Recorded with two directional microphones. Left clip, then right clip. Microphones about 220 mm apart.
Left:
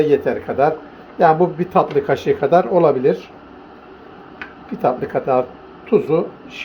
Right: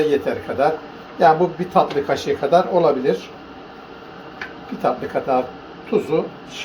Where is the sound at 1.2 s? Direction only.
50° left (ahead or behind).